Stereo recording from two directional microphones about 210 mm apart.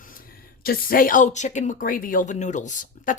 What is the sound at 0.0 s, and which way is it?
Speech, 40° left (ahead or behind).